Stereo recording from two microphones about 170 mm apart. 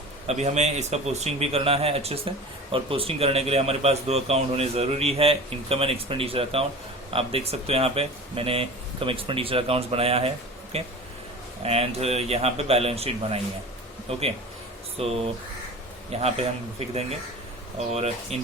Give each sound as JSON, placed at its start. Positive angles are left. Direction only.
{"t": 0.3, "sound": "speech", "side_deg": -40}